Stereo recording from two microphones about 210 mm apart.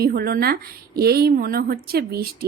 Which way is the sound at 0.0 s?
45° right (ahead or behind).